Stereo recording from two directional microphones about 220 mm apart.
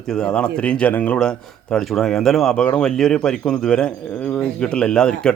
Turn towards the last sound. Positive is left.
turn(degrees=5)  # may be behind; listen again after turning